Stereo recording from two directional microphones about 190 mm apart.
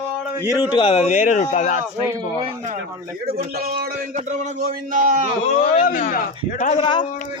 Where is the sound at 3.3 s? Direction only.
50° right (ahead or behind).